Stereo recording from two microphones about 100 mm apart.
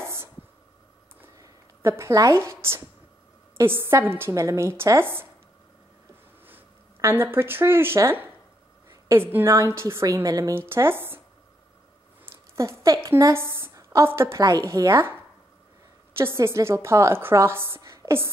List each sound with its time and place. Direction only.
0.0 s a sound: 25° right (ahead or behind)
1.4 s a woman's voice: 30° right (ahead or behind)
6.4 s a woman's voice: 20° right (ahead or behind)
10.7 s a woman's voice: 25° right (ahead or behind)
12.3 s a sound: 30° right (ahead or behind)
12.8 s a woman's voice: 30° right (ahead or behind)
16.2 s a woman's voice: 25° right (ahead or behind)